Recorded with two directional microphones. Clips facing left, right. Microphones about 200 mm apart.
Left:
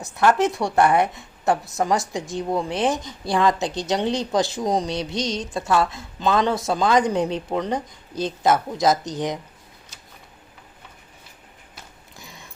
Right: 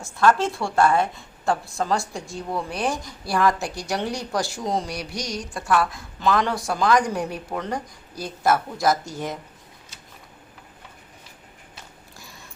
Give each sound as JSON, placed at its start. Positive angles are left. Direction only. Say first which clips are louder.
{"t": 0.0, "sound": "a woman's voice", "louder": "left 1 dB", "side_deg": 20}